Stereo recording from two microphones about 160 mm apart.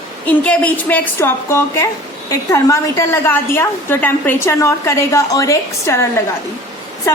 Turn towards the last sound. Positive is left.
turn(degrees=15)  # may be behind; listen again after turning